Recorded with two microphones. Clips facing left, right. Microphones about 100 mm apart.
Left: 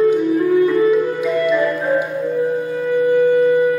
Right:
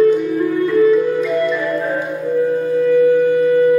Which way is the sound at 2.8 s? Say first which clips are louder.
Right 1 dB; 15° left (ahead or behind).